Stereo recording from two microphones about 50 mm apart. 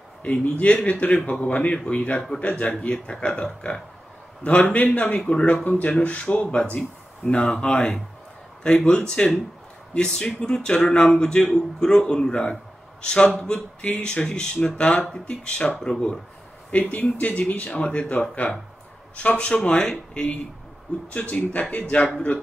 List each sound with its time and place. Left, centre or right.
0.2 s speech: left
16.7 s speech: left; by 20.3 s centre
21.1 s speech: left